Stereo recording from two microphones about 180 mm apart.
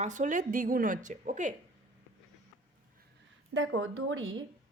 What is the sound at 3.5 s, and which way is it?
Speech, 90° right.